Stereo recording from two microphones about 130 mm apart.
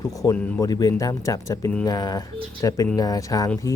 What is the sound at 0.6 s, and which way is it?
Speech, 25° left (ahead or behind).